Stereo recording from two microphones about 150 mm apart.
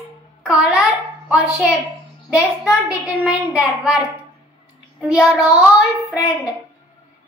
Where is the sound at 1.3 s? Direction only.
5° right (ahead or behind).